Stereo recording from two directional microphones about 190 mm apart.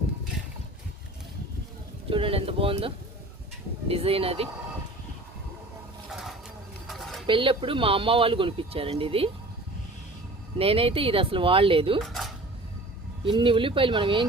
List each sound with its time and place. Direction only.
2.0 s speech: 30° right (ahead or behind)
6.1 s bird: centre (ahead or behind)
6.8 s pigeon: centre (ahead or behind)
7.3 s speech: 25° right (ahead or behind)
10.6 s speech: 30° right (ahead or behind)
11.9 s a sound: centre (ahead or behind)
13.2 s speech: 25° right (ahead or behind)